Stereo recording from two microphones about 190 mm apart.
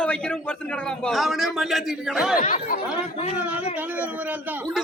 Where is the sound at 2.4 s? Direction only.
40° left (ahead or behind).